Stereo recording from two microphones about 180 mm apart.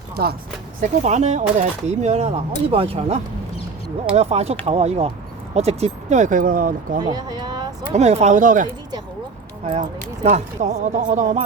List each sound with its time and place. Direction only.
0.8 s speech: 40° right (ahead or behind)
7.0 s speech: 25° right (ahead or behind)
7.9 s speech: 40° right (ahead or behind)
9.6 s speech: 45° right (ahead or behind)